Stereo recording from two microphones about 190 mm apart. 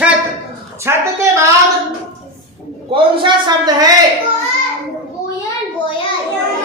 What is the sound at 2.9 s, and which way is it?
Speech, 25° right (ahead or behind).